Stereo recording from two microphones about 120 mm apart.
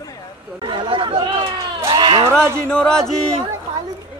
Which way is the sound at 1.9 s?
40° right (ahead or behind).